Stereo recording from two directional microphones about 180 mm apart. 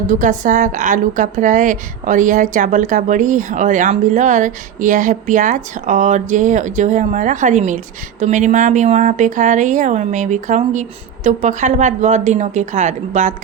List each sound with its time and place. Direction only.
0.1 s a woman's voice: 45° right (ahead or behind)